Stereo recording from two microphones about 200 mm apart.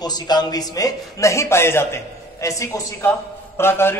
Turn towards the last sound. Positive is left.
turn(degrees=10)  # may be behind; listen again after turning